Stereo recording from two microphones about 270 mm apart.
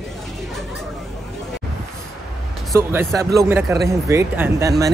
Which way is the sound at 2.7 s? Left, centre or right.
Centre.